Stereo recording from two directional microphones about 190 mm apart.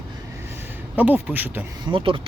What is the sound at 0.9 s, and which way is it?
Speech, 10° right (ahead or behind).